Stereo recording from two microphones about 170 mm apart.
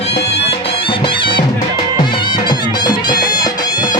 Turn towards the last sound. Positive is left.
turn(degrees=25)  # may be behind; listen again after turning